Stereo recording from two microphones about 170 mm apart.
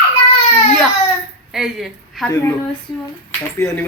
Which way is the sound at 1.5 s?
Centre (ahead or behind).